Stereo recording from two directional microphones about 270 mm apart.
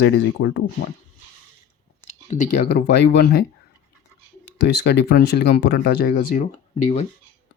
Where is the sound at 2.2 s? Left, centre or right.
Left.